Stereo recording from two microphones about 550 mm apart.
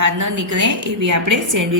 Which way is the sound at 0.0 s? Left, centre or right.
Right.